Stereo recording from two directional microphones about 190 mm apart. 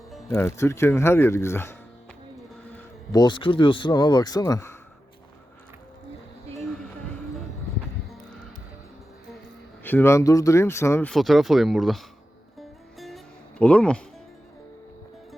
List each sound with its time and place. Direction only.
0.3 s speech: 15° left (ahead or behind)
2.7 s speech: 20° left (ahead or behind)
9.8 s speech: 10° left (ahead or behind)
11.1 s speech: centre (ahead or behind)
12.5 s music: centre (ahead or behind)